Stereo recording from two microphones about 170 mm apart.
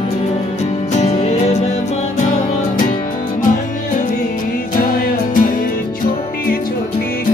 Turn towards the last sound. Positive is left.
turn(degrees=55)  # may be behind; listen again after turning